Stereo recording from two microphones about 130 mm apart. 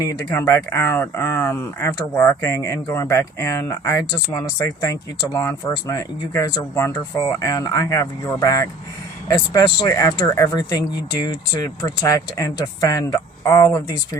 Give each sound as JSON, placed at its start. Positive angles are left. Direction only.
{"t": 0.0, "sound": "speech", "side_deg": 25}